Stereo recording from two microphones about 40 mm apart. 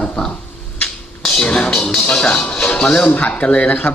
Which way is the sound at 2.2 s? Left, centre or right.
Left.